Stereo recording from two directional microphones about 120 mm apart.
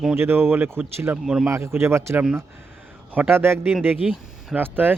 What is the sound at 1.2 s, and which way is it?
Speech, 5° right (ahead or behind).